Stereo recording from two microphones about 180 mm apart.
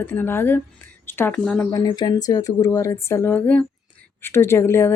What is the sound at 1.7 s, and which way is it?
Speech, 20° left (ahead or behind).